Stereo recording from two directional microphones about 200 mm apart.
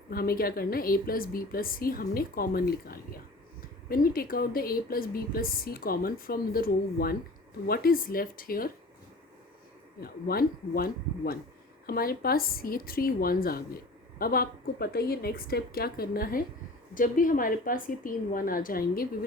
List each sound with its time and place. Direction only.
0.1 s speech: 50° left (ahead or behind)
10.0 s speech: 50° left (ahead or behind)